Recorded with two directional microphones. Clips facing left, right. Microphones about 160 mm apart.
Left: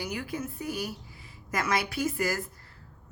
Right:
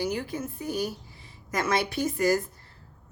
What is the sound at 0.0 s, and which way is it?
A woman's voice, 30° right (ahead or behind).